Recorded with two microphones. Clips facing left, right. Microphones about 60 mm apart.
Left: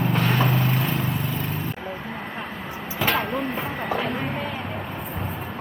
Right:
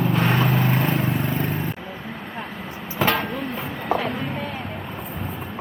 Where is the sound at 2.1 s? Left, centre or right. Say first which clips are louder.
Left 1 dB; centre.